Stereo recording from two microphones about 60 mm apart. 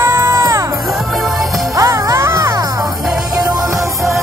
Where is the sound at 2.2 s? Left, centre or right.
Right.